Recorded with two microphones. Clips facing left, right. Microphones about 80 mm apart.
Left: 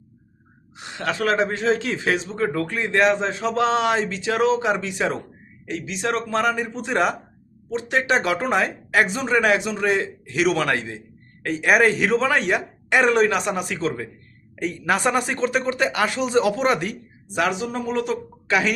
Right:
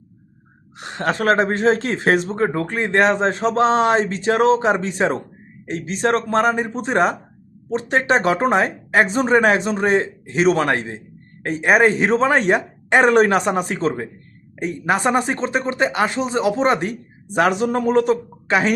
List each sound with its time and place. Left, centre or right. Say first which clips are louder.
0.8 s speech: right 3 dB; right